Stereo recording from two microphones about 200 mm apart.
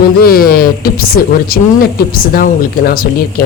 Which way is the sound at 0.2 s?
50° left (ahead or behind).